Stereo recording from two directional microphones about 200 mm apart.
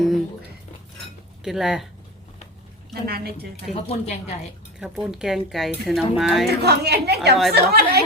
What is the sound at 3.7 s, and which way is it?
Speech, 35° left (ahead or behind).